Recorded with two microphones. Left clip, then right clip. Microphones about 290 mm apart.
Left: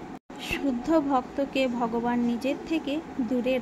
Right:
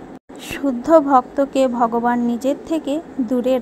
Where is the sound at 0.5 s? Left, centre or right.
Centre.